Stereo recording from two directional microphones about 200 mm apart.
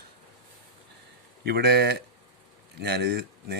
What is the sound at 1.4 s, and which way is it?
Speech, 55° right (ahead or behind).